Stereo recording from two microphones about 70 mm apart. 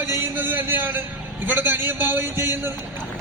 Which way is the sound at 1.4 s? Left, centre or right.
Right.